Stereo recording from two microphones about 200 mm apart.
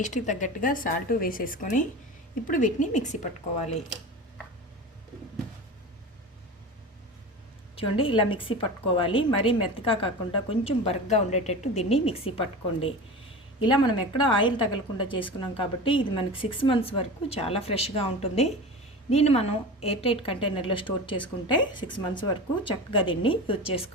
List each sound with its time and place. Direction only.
0.0 s speech: 35° left (ahead or behind)
7.8 s a woman's voice: 25° left (ahead or behind)